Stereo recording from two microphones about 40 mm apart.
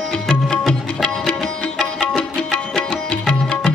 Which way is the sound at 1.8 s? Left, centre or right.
Left.